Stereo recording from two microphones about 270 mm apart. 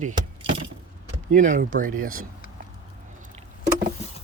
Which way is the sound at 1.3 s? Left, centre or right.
Right.